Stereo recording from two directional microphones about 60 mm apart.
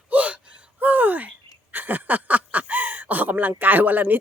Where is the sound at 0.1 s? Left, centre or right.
Right.